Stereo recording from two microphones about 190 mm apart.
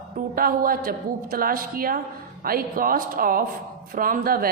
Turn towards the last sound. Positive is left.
turn(degrees=-50)  # may be behind; listen again after turning